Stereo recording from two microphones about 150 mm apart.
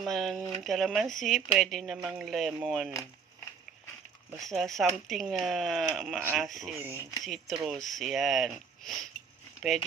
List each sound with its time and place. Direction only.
0.0 s speech: centre (ahead or behind)
4.4 s speech: centre (ahead or behind)
6.8 s speech: 15° right (ahead or behind)
7.2 s speech: centre (ahead or behind)